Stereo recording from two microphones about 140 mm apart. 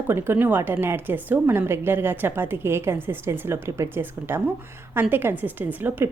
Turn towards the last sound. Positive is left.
turn(degrees=-15)  # may be behind; listen again after turning